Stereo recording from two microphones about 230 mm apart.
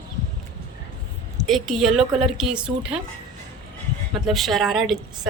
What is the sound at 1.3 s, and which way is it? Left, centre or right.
A woman's voice, centre.